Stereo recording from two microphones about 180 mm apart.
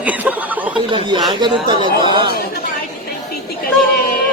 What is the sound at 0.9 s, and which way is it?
Speech, 25° right (ahead or behind).